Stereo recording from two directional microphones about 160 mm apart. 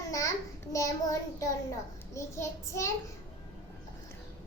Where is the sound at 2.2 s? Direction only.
15° left (ahead or behind).